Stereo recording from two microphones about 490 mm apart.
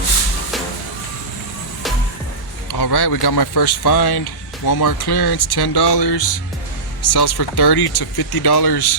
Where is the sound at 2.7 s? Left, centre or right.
Left.